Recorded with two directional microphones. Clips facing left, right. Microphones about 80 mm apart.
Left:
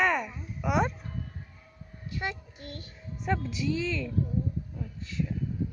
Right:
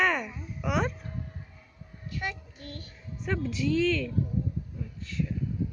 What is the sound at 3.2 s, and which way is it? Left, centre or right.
A woman's voice, centre.